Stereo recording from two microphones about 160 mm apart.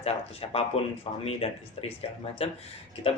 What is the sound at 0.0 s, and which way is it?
Speech, 40° left (ahead or behind).